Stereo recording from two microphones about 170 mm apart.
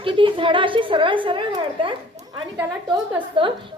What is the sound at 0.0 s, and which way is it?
A woman's voice, 30° right (ahead or behind).